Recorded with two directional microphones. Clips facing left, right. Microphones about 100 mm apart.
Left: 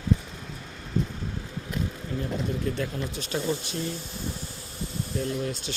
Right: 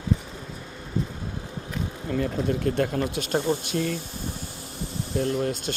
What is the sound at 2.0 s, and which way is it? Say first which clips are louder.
Speech: right 8 dB; 75° right (ahead or behind).